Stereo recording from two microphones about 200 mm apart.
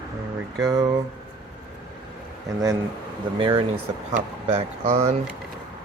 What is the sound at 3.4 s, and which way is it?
Speech, 25° right (ahead or behind).